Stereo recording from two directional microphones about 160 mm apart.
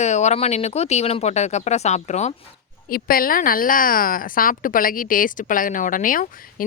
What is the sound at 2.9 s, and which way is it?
A woman's voice, 65° left (ahead or behind).